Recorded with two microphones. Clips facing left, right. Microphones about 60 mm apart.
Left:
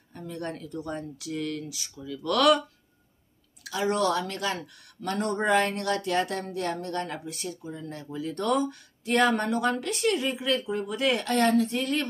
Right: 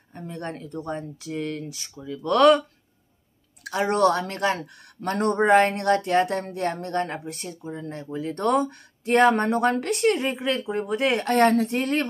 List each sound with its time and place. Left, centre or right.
0.1 s speech: right
3.6 s a woman's voice: right
8.3 s a woman's voice: right